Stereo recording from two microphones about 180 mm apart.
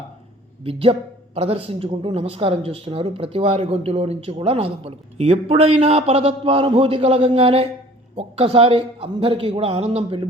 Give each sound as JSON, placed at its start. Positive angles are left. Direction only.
{"t": 0.6, "sound": "a woman's voice", "side_deg": -30}